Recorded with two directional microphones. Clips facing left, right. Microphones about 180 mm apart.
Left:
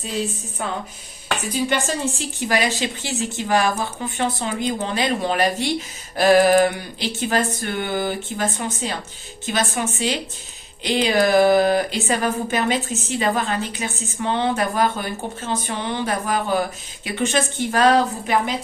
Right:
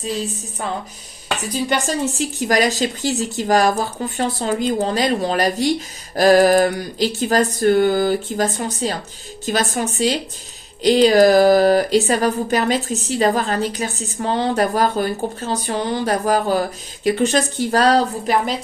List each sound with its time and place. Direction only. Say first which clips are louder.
1.7 s speech: right 2 dB; 40° right (ahead or behind)